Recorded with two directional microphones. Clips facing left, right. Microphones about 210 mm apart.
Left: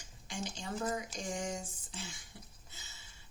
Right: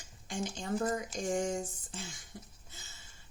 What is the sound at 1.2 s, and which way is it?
A woman's voice, 50° right (ahead or behind).